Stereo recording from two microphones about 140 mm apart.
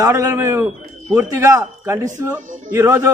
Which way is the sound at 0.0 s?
20° right (ahead or behind).